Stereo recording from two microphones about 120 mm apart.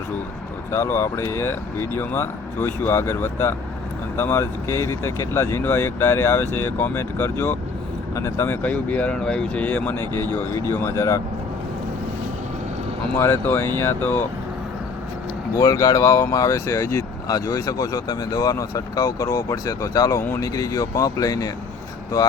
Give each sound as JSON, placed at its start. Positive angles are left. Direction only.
{"t": 0.7, "sound": "speech", "side_deg": 20}
{"t": 8.6, "sound": "speech", "side_deg": 15}
{"t": 13.1, "sound": "speech", "side_deg": 20}
{"t": 15.5, "sound": "speech", "side_deg": 25}